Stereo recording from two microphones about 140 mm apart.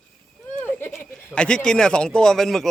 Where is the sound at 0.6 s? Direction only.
15° left (ahead or behind).